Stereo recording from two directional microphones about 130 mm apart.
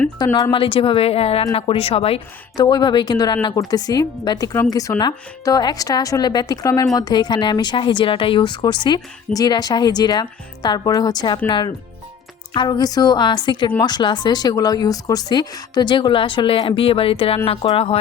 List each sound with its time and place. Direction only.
0.2 s speech: 30° left (ahead or behind)
0.5 s a woman's voice: 40° left (ahead or behind)
2.6 s speech: 35° left (ahead or behind); by 17.9 s 50° left (ahead or behind)